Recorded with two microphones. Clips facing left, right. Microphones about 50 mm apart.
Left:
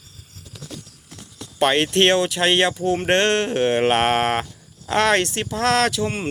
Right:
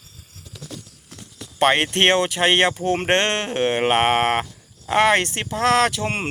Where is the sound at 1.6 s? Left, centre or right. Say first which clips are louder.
Even; right.